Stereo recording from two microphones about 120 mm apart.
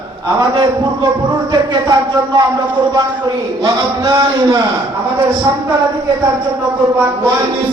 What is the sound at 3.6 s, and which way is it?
Speech, 30° right (ahead or behind).